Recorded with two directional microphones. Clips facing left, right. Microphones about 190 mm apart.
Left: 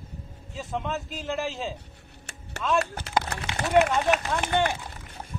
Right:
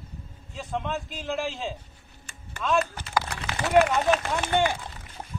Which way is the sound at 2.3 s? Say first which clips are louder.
Left 5 dB; 70° left (ahead or behind).